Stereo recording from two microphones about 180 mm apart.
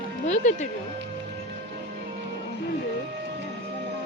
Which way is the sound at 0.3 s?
40° left (ahead or behind).